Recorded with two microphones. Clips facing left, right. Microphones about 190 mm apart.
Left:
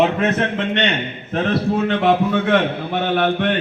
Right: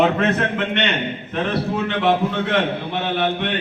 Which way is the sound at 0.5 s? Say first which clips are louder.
Left 2 dB; 35° left (ahead or behind).